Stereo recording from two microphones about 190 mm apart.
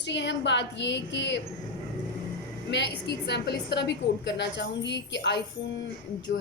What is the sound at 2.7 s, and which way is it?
A woman's voice, 65° left (ahead or behind).